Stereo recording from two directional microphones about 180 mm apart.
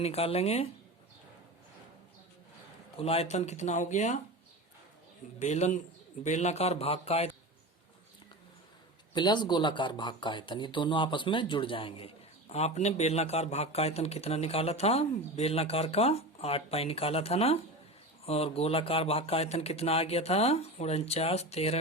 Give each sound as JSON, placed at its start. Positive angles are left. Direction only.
{"t": 0.0, "sound": "speech", "side_deg": 35}
{"t": 3.0, "sound": "speech", "side_deg": 35}
{"t": 5.4, "sound": "speech", "side_deg": 40}
{"t": 9.1, "sound": "speech", "side_deg": 25}